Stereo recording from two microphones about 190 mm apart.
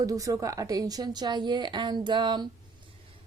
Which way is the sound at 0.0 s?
15° right (ahead or behind).